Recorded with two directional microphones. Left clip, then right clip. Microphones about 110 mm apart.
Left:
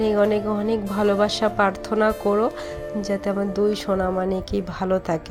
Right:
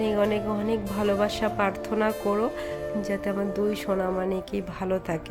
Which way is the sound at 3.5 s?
25° left (ahead or behind).